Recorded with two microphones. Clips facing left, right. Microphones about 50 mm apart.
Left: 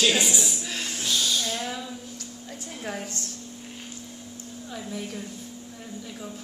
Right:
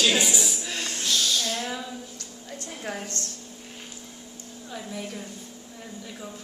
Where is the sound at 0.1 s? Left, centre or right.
Centre.